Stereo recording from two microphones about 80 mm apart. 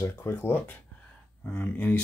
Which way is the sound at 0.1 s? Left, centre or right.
Left.